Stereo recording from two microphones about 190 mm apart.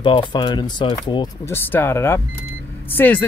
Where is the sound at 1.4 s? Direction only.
10° left (ahead or behind).